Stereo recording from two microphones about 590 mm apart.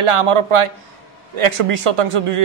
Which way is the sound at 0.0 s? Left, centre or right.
Right.